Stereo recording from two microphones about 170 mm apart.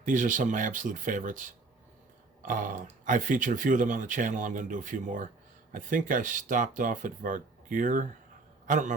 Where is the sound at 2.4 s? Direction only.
50° right (ahead or behind).